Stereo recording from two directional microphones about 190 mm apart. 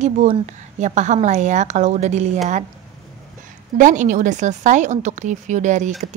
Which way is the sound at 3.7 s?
40° right (ahead or behind).